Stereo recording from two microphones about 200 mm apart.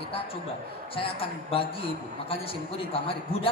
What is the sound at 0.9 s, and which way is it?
A man's voice, 25° left (ahead or behind).